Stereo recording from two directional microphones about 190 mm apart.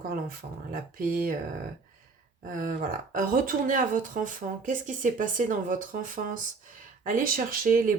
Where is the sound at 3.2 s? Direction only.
45° right (ahead or behind).